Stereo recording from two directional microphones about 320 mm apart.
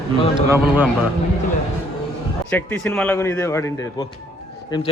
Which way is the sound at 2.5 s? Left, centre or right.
Centre.